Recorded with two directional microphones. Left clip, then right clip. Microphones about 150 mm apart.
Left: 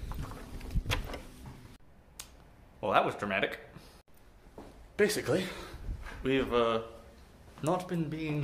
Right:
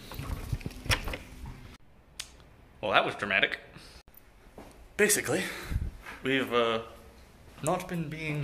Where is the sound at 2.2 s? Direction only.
20° left (ahead or behind).